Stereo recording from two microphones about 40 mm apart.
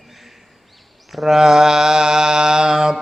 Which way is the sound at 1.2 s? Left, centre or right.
Centre.